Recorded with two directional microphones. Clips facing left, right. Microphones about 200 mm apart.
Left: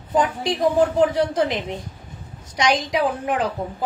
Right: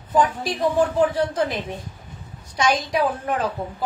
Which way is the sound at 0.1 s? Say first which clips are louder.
Even; 20° left (ahead or behind).